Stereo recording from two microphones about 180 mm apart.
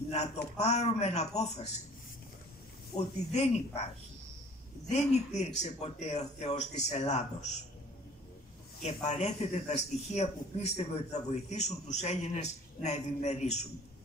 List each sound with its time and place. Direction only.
0.1 s a man's voice: 40° left (ahead or behind)
3.0 s a man's voice: 35° left (ahead or behind)
4.8 s a man's voice: 40° left (ahead or behind)
8.8 s a man's voice: 40° left (ahead or behind)